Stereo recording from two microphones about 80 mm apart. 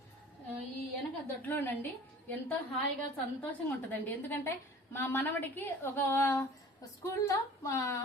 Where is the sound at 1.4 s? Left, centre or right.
Left.